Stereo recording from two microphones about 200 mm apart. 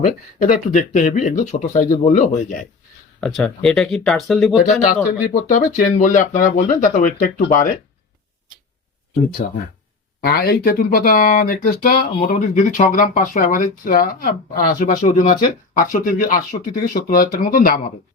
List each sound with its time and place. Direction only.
0.4 s speech: 40° left (ahead or behind)
3.2 s speech: centre (ahead or behind)
5.3 s speech: 40° left (ahead or behind)
9.4 s speech: 40° left (ahead or behind)
10.2 s speech: 50° left (ahead or behind)